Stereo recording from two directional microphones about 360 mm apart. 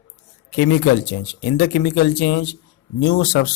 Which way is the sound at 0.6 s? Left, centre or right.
Left.